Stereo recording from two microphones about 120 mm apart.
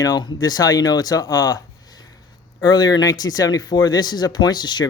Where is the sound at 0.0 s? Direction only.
35° left (ahead or behind).